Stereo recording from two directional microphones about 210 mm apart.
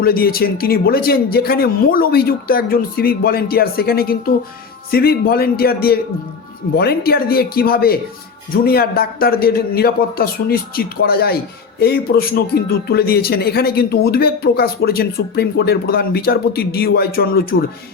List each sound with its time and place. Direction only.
0.0 s speech: 45° left (ahead or behind)